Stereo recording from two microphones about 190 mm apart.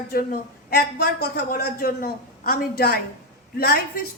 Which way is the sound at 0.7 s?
55° left (ahead or behind).